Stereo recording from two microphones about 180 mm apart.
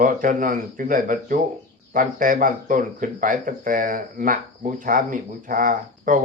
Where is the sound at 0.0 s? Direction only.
50° right (ahead or behind).